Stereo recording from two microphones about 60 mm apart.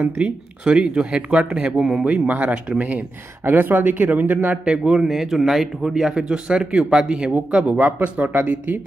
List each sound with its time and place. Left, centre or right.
0.0 s speech: right
2.2 s speech: right
3.4 s speech: right
4.6 s speech: centre
5.0 s speech: centre; by 8.8 s right